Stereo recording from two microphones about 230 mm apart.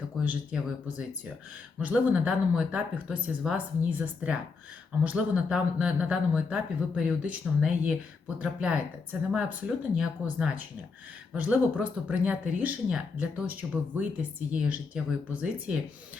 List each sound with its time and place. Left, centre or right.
0.3 s speech: centre